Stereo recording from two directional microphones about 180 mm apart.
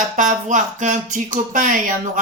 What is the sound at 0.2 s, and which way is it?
Speech, 45° right (ahead or behind).